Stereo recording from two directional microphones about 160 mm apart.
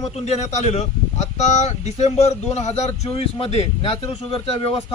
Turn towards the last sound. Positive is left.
turn(degrees=35)  # may be behind; listen again after turning